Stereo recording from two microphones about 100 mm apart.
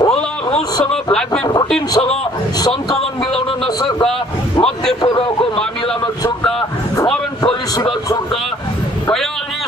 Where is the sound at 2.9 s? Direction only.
70° left (ahead or behind).